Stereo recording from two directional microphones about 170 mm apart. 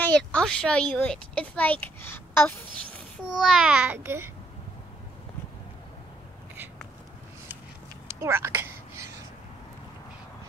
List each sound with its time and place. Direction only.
0.0 s speech: 5° left (ahead or behind)
3.4 s a child's voice: 5° right (ahead or behind)
8.1 s a sound: 15° right (ahead or behind)